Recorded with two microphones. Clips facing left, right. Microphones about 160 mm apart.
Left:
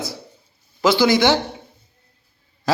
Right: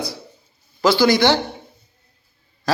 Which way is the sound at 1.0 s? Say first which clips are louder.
Even; 20° left (ahead or behind).